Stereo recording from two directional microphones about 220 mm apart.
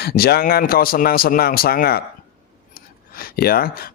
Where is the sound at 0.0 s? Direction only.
45° left (ahead or behind).